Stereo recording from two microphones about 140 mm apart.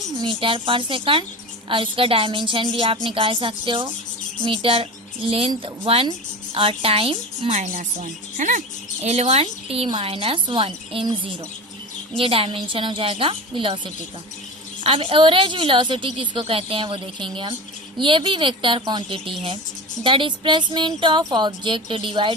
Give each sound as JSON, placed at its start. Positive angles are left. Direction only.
{"t": 0.2, "sound": "a woman's voice", "side_deg": -40}
{"t": 7.5, "sound": "speech", "side_deg": -60}
{"t": 9.0, "sound": "a woman's voice", "side_deg": -50}